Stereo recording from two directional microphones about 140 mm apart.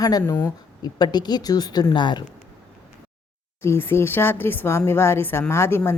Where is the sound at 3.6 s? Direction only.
20° left (ahead or behind).